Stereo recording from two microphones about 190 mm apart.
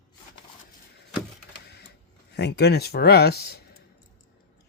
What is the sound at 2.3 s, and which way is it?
Speech, 60° left (ahead or behind).